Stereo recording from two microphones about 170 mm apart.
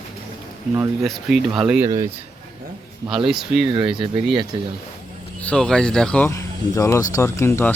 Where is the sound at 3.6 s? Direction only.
30° right (ahead or behind).